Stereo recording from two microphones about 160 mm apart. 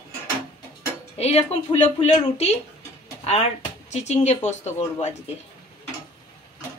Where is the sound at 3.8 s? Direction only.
45° left (ahead or behind).